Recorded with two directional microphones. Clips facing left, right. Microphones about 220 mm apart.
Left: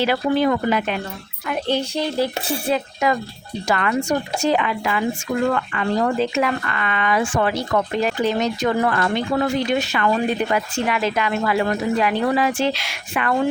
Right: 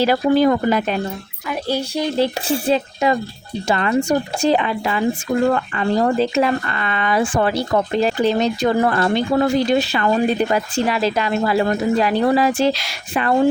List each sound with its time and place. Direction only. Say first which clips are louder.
0.0 s speech: right 4 dB; 40° right (ahead or behind)
1.5 s speech: even; 10° right (ahead or behind)
2.1 s speech: right 3 dB; 30° right (ahead or behind)